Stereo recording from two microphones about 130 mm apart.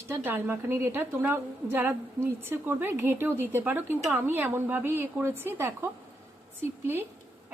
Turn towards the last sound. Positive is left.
turn(degrees=-15)  # may be behind; listen again after turning